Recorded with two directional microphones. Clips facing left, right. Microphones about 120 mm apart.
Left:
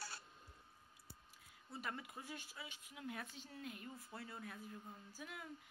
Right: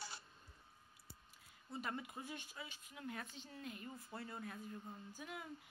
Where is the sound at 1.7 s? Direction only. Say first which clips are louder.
Right 3 dB; centre (ahead or behind).